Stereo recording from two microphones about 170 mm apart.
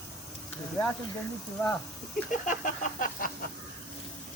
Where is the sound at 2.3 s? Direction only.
50° left (ahead or behind).